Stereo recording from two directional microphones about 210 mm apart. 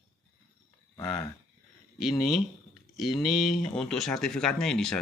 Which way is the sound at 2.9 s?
Centre (ahead or behind).